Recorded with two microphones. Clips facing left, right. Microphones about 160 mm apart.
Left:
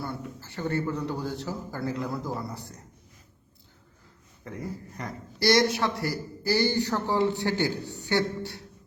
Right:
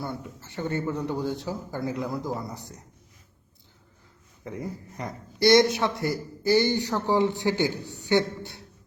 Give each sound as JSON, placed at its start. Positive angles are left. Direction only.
{"t": 0.5, "sound": "a man's voice", "side_deg": -20}
{"t": 4.4, "sound": "a man's voice", "side_deg": -15}